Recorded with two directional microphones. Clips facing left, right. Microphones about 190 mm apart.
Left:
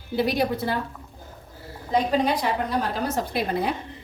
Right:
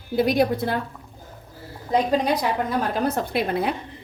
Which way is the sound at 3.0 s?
60° right (ahead or behind).